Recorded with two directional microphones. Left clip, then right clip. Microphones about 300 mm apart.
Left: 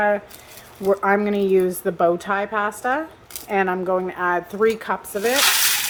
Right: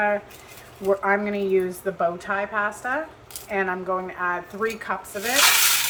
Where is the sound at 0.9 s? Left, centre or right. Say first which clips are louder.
Left 3 dB; left.